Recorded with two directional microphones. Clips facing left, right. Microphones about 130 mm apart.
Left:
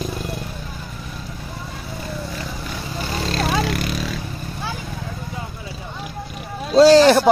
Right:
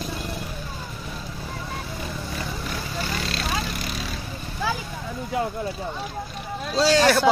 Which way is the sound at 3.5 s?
90° left.